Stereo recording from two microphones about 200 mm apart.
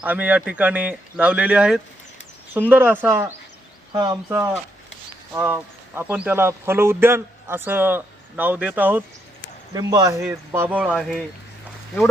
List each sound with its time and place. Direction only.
0.0 s speech: 10° right (ahead or behind)
5.3 s speech: 10° right (ahead or behind)